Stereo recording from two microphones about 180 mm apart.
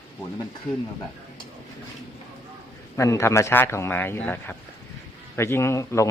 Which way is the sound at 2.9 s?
15° left (ahead or behind).